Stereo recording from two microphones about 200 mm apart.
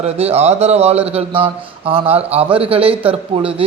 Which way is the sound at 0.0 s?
30° right (ahead or behind).